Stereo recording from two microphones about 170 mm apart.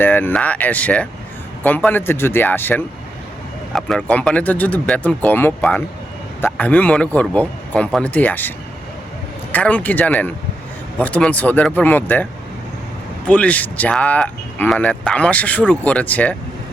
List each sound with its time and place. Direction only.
0.0 s speech: 10° left (ahead or behind)